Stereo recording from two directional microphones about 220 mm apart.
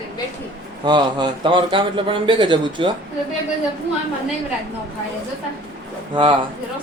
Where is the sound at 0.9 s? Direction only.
20° right (ahead or behind).